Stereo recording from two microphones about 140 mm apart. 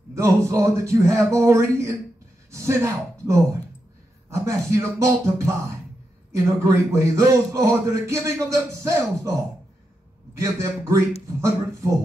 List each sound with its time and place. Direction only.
0.1 s speech: 20° right (ahead or behind)
10.3 s speech: 20° right (ahead or behind)